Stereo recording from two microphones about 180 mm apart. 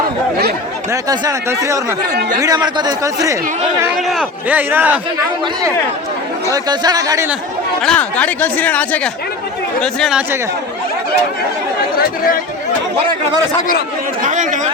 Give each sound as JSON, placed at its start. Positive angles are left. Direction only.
{"t": 1.0, "sound": "a man's voice", "side_deg": -20}
{"t": 3.9, "sound": "a man's voice", "side_deg": 0}
{"t": 6.5, "sound": "speech", "side_deg": -20}
{"t": 7.8, "sound": "speech", "side_deg": 5}
{"t": 11.9, "sound": "speech", "side_deg": 55}
{"t": 13.6, "sound": "speech", "side_deg": 50}
{"t": 14.2, "sound": "speech", "side_deg": -45}